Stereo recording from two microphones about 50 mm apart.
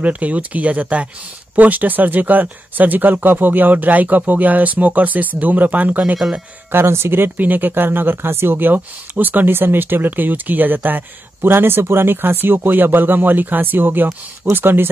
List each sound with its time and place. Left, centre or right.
0.0 s speech: right
6.7 s speech: right
7.3 s speech: right